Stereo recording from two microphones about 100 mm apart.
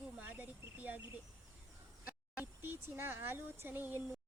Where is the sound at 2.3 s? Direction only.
20° right (ahead or behind).